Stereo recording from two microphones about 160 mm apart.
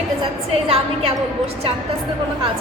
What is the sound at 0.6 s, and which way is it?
Speech, 40° right (ahead or behind).